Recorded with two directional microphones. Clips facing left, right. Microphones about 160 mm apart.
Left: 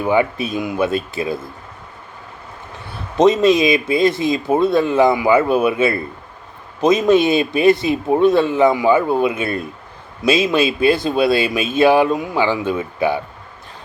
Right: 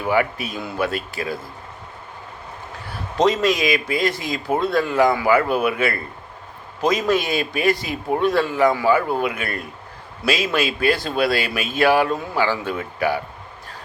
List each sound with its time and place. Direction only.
0.0 s speech: 20° left (ahead or behind)
3.2 s speech: 20° left (ahead or behind)